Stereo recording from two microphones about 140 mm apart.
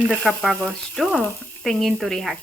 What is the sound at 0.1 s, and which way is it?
Speech, centre (ahead or behind).